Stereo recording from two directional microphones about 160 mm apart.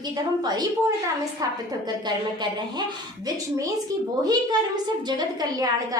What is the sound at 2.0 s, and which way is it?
Speech, 25° right (ahead or behind).